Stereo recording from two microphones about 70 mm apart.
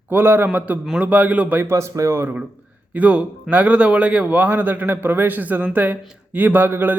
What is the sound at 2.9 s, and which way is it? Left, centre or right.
A man's voice, centre.